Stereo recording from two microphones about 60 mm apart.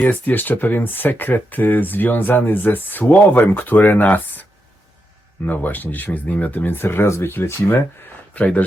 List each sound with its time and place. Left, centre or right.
0.0 s speech: left
5.5 s speech: left
8.4 s speech: left